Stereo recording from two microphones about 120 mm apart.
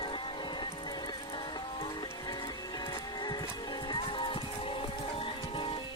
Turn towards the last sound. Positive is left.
turn(degrees=50)  # may be behind; listen again after turning